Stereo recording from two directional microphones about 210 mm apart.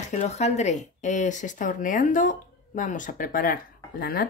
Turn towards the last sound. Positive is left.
turn(degrees=45)  # may be behind; listen again after turning